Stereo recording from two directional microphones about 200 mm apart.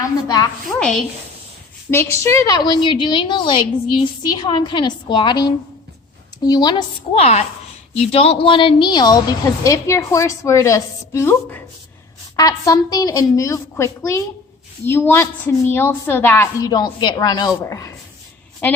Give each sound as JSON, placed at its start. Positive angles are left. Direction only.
{"t": 0.3, "sound": "a woman's voice", "side_deg": 20}
{"t": 0.8, "sound": "a woman's voice", "side_deg": 0}
{"t": 1.9, "sound": "a woman's voice", "side_deg": 15}